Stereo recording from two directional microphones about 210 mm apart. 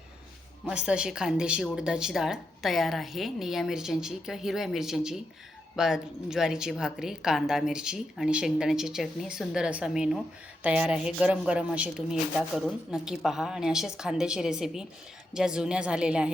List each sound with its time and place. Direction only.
0.7 s a woman's voice: 5° right (ahead or behind)